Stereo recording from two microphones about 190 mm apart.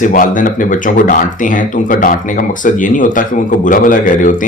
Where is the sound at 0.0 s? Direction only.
45° left (ahead or behind).